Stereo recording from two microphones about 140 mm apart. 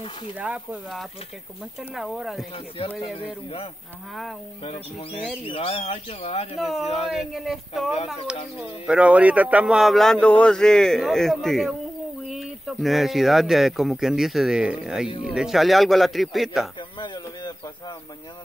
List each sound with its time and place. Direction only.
0.4 s speech: 10° right (ahead or behind)
4.6 s speech: 40° left (ahead or behind)
6.6 s speech: centre (ahead or behind)
15.0 s speech: 40° left (ahead or behind)
15.3 s speech: centre (ahead or behind)
17.0 s a sound: 30° left (ahead or behind)